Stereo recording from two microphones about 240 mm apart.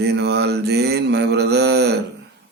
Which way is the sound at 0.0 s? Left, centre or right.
Right.